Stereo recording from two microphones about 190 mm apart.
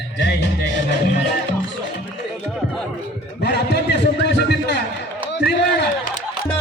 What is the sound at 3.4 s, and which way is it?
A man's voice, 65° left (ahead or behind).